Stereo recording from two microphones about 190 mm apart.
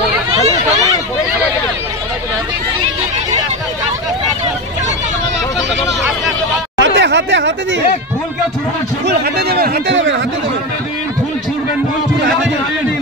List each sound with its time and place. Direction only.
6.8 s chatter: 70° right (ahead or behind)
9.0 s a man's voice: 55° right (ahead or behind)